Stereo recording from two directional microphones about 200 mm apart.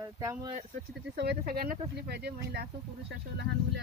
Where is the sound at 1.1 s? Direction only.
55° right (ahead or behind).